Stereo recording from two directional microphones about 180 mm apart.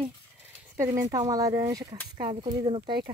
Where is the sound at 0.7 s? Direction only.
15° right (ahead or behind).